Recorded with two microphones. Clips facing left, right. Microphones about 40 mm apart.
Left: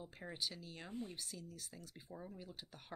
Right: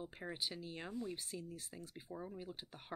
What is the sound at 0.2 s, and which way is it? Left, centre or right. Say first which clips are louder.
Speech: right 1 dB; centre.